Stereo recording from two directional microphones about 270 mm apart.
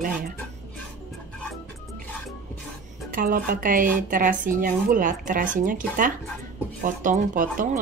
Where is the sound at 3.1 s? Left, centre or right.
Right.